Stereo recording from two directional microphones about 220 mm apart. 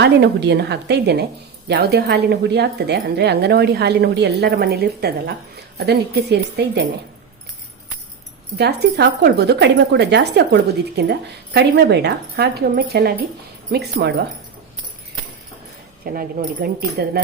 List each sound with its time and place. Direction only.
0.0 s speech: 50° right (ahead or behind)
8.5 s speech: 50° right (ahead or behind)
16.1 s speech: 40° right (ahead or behind)